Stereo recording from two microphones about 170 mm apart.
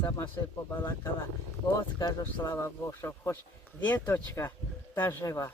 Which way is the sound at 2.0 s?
20° left (ahead or behind).